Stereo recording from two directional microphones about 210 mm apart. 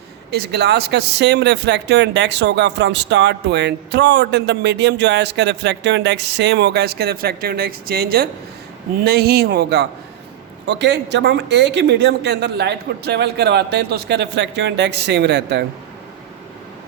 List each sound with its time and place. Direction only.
0.3 s speech: 50° right (ahead or behind)